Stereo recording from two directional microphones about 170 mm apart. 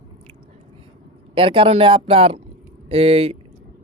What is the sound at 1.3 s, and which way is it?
A man's voice, 30° right (ahead or behind).